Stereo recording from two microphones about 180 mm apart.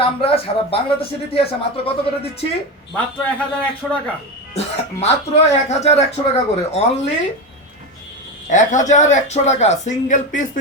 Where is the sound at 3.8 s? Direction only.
Centre (ahead or behind).